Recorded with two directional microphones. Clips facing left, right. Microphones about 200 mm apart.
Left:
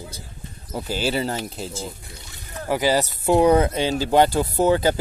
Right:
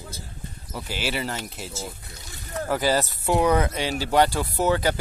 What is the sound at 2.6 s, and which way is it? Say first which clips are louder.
Speech: left 3 dB; 15° left (ahead or behind).